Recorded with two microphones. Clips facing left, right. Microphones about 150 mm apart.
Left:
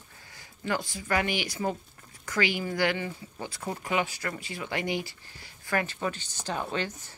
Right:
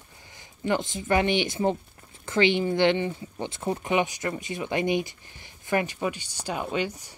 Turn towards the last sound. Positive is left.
turn(degrees=-10)  # may be behind; listen again after turning